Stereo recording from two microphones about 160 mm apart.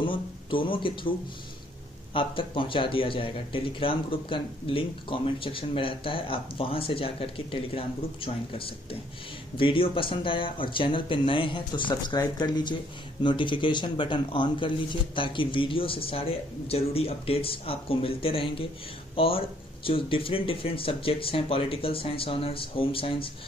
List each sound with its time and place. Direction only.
0.0 s speech: 30° left (ahead or behind)
2.1 s a man's voice: 35° left (ahead or behind)